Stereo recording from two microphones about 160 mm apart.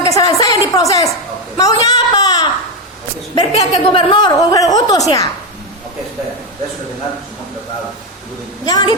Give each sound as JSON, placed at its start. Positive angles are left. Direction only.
{"t": 0.1, "sound": "a sound", "side_deg": 20}
{"t": 3.3, "sound": "a woman's voice", "side_deg": 35}
{"t": 8.6, "sound": "a woman's voice", "side_deg": 25}